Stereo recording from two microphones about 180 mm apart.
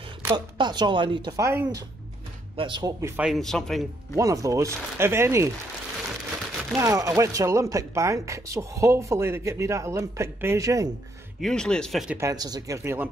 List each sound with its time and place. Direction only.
0.6 s speech: 25° right (ahead or behind)
2.5 s speech: 25° right (ahead or behind)
3.0 s a man's voice: 5° right (ahead or behind)
4.2 s speech: 20° right (ahead or behind)
6.7 s speech: 15° right (ahead or behind)
11.4 s a man's voice: 5° left (ahead or behind)
12.2 s speech: 20° right (ahead or behind)